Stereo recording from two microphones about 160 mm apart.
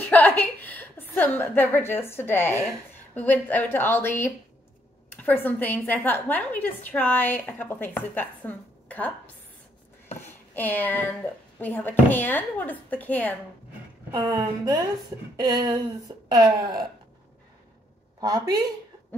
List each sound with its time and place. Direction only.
0.0 s a sound: 10° left (ahead or behind)
1.4 s a woman's voice: 10° left (ahead or behind)
10.5 s a woman's voice: 10° left (ahead or behind)
14.1 s speech: 20° right (ahead or behind)
18.2 s speech: 25° right (ahead or behind)